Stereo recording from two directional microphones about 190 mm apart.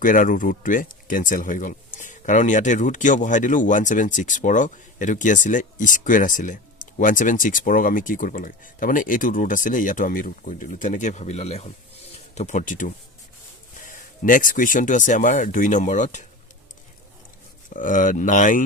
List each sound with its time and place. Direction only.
0.0 s speech: 45° left (ahead or behind)
17.7 s speech: 45° left (ahead or behind)